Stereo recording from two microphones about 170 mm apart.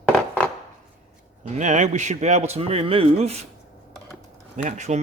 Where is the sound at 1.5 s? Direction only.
45° right (ahead or behind).